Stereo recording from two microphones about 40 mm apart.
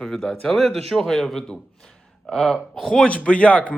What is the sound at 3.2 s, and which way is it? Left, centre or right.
Speech, left.